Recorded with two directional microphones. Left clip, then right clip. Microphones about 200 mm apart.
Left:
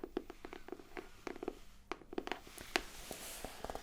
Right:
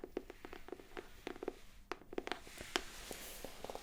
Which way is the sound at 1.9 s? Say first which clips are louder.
Left 1 dB; 20° left (ahead or behind).